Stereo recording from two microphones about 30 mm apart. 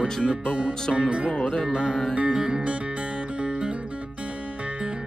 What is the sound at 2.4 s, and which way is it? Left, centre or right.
Music, right.